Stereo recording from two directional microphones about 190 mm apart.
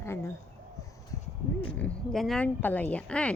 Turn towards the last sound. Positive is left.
turn(degrees=5)  # may be behind; listen again after turning